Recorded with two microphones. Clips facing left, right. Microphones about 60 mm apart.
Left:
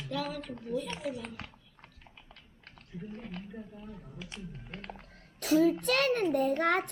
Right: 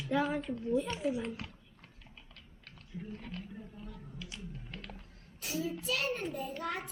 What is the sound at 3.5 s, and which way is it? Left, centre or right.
Speech, centre.